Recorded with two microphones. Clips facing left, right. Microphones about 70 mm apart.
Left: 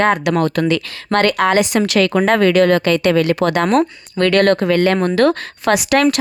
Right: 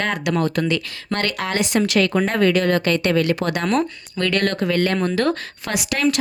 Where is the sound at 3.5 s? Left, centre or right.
Left.